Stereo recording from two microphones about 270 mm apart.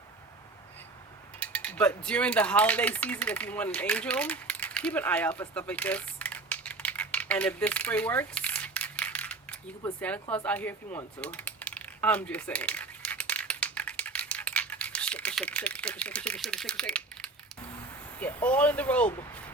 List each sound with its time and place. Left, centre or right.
1.4 s cutlery: centre
18.4 s speech: centre